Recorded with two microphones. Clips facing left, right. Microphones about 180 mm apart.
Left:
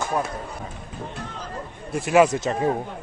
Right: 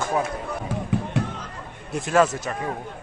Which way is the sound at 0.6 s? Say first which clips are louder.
Right 8 dB; 75° right (ahead or behind).